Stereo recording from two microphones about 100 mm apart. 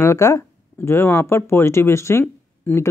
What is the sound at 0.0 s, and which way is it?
Speech, 30° left (ahead or behind).